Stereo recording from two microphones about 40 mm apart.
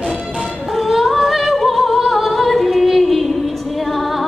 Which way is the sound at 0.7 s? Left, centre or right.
Centre.